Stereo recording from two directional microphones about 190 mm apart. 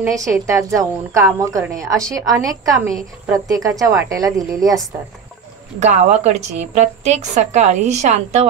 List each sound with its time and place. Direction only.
0.0 s a woman's voice: 15° right (ahead or behind)
5.8 s a woman's voice: 35° right (ahead or behind)